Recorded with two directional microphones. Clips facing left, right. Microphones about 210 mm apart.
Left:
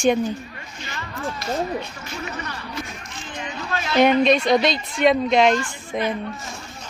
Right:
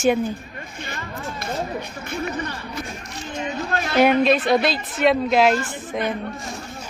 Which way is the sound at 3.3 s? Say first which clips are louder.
Right 4 dB; 50° right (ahead or behind).